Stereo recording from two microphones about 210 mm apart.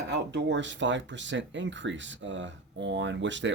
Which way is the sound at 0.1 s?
55° right (ahead or behind).